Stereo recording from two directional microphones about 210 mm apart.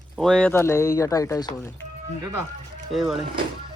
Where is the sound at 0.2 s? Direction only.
5° left (ahead or behind).